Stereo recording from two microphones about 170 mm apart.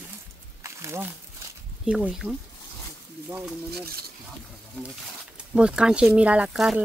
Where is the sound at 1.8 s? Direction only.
5° right (ahead or behind).